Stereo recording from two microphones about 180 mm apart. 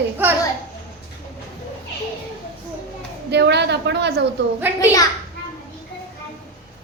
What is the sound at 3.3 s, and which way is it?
A woman's voice, 70° right (ahead or behind).